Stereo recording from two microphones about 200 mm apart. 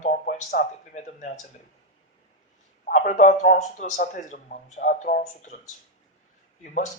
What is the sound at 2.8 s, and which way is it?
Speech, 40° left (ahead or behind).